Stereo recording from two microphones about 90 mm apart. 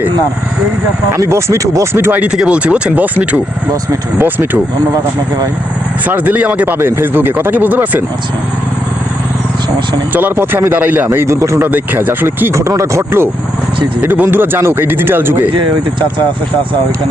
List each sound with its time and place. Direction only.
1.1 s speech: 30° right (ahead or behind)
2.2 s speech: 10° right (ahead or behind)
6.1 s speech: 20° right (ahead or behind)
10.1 s speech: 20° right (ahead or behind)
11.3 s speech: 35° right (ahead or behind)
11.6 s speech: 20° right (ahead or behind)
15.4 s speech: 65° right (ahead or behind)